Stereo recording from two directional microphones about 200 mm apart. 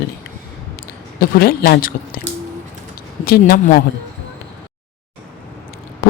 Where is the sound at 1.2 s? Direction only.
50° left (ahead or behind).